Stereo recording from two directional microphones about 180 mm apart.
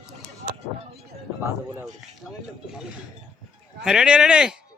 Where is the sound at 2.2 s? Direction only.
Centre (ahead or behind).